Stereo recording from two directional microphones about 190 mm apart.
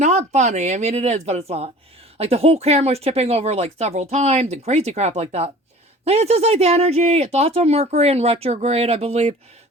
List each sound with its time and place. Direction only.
0.0 s speech: 35° right (ahead or behind)